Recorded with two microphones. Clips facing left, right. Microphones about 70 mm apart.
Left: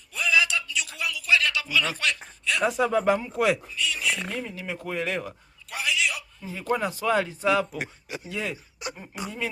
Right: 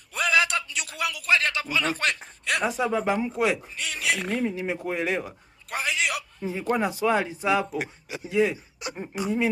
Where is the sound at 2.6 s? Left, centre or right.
Centre.